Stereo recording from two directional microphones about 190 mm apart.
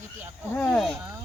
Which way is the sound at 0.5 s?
5° left (ahead or behind).